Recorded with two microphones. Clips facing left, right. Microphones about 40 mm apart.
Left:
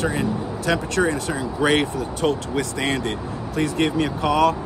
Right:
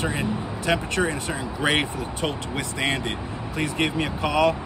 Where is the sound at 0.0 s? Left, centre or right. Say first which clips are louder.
Left 3 dB; right.